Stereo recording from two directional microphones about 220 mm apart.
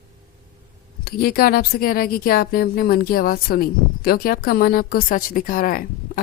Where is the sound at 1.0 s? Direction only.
45° left (ahead or behind).